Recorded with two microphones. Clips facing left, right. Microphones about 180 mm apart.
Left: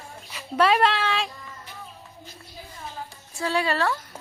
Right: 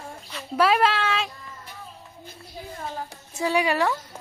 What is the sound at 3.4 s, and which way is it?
Speech, 15° right (ahead or behind).